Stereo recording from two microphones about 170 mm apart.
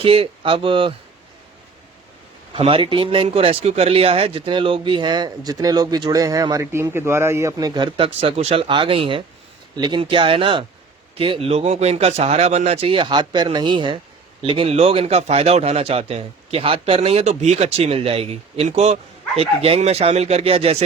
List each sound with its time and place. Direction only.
0.0 s a man's voice: 35° right (ahead or behind)
2.5 s a man's voice: 30° right (ahead or behind)